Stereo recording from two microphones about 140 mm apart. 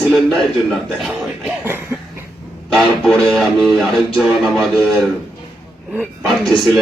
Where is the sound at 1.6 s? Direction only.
15° right (ahead or behind).